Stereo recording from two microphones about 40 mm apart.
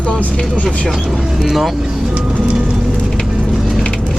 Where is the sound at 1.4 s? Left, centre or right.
Centre.